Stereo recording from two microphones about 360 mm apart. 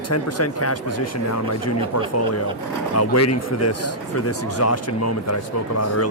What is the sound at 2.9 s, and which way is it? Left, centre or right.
A man's voice, left.